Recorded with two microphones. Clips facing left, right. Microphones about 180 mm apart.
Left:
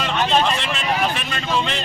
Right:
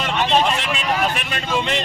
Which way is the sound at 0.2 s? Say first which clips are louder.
Right 1 dB; 10° right (ahead or behind).